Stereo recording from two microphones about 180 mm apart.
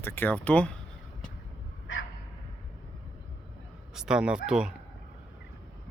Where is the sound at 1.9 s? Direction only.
90° left.